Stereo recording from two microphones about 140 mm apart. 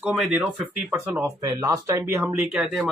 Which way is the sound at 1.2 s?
25° right (ahead or behind).